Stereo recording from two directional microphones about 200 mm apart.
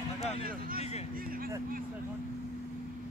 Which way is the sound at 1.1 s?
45° right (ahead or behind).